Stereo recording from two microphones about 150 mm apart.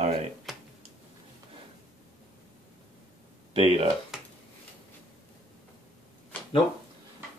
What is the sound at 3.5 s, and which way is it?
Speech, 40° right (ahead or behind).